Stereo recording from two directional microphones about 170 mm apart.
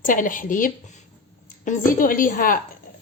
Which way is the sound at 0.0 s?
50° left (ahead or behind).